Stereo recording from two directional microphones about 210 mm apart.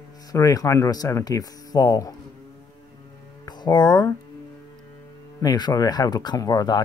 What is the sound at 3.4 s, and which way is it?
Speech, 20° left (ahead or behind).